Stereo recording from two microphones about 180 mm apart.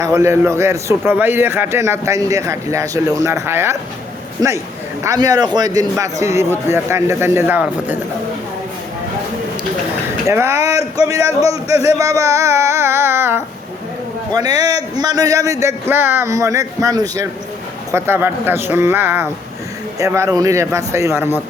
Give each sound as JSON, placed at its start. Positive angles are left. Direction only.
{"t": 0.0, "sound": "a man's voice", "side_deg": -15}
{"t": 5.0, "sound": "a man's voice", "side_deg": -20}
{"t": 10.2, "sound": "a man's voice", "side_deg": -15}